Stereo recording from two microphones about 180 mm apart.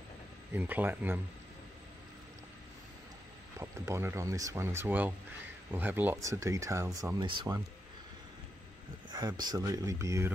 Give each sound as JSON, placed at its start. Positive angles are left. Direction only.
{"t": 0.5, "sound": "speech", "side_deg": -10}
{"t": 3.5, "sound": "speech", "side_deg": -15}
{"t": 9.1, "sound": "speech", "side_deg": -20}